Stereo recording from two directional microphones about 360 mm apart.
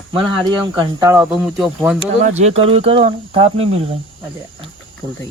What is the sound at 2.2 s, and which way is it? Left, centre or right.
Speech, centre.